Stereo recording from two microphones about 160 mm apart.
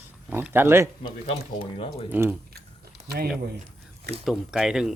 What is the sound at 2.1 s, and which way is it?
Speech, 10° right (ahead or behind).